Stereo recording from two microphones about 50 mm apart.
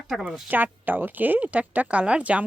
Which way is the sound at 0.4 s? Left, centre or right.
Right.